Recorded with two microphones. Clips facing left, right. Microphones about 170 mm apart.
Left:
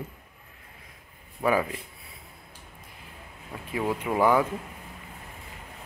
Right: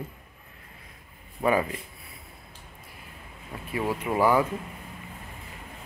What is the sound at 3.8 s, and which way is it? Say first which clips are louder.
Speech: even; 10° right (ahead or behind).